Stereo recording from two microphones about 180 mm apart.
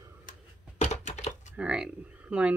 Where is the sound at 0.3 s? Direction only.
40° left (ahead or behind).